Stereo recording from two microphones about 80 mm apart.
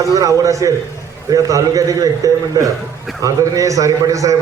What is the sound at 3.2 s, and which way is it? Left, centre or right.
A man's voice, right.